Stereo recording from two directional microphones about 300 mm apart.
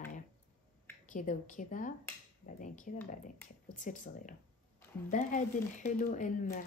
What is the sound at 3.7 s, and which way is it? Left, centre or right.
A woman's voice, left.